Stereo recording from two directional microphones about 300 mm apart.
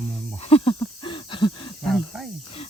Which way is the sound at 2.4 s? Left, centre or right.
Centre.